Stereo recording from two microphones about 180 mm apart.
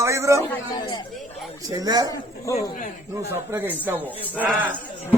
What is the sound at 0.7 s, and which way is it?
Speech, 25° left (ahead or behind).